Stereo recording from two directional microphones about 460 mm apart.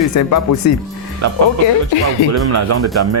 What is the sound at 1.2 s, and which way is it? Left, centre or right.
Speech, right.